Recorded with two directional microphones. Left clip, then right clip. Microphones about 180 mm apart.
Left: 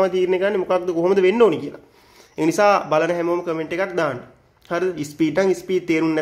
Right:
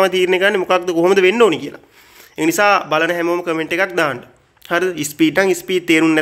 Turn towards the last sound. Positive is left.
turn(degrees=-10)  # may be behind; listen again after turning